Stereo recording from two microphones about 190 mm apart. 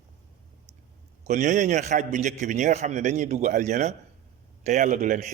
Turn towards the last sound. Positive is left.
turn(degrees=-40)  # may be behind; listen again after turning